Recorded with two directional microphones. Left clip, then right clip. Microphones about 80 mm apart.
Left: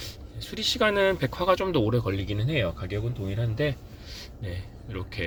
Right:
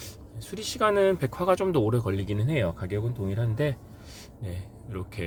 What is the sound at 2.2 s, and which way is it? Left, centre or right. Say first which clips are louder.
Speech: even; right.